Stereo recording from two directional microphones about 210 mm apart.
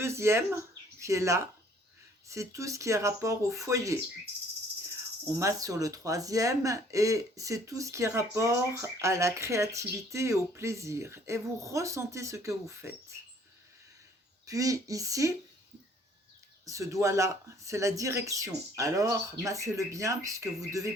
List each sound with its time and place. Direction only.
0.0 s speech: 10° right (ahead or behind)
5.4 s speech: 15° right (ahead or behind)
14.4 s speech: 15° right (ahead or behind)
16.6 s speech: 15° right (ahead or behind)